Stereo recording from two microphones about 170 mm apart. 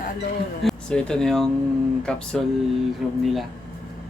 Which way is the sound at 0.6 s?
5° left (ahead or behind).